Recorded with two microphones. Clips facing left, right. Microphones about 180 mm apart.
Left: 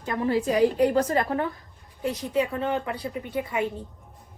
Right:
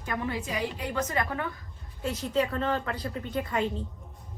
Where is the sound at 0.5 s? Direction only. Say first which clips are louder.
Left 14 dB; 45° left (ahead or behind).